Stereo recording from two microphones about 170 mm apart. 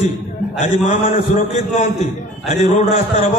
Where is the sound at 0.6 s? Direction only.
45° left (ahead or behind).